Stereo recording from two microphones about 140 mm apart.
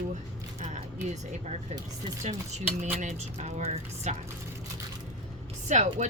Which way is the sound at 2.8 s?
55° right (ahead or behind).